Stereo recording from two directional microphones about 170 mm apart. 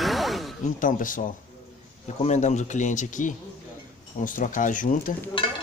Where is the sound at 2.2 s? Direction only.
45° left (ahead or behind).